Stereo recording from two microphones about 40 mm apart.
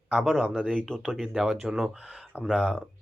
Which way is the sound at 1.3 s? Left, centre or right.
Centre.